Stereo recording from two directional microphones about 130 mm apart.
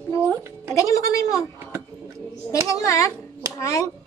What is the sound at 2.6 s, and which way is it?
Speech, 25° left (ahead or behind).